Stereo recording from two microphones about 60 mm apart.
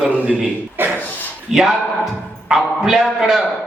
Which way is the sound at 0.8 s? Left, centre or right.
Right.